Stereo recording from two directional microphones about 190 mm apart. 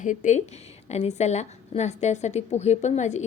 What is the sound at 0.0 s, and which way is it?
A woman's voice, 40° left (ahead or behind).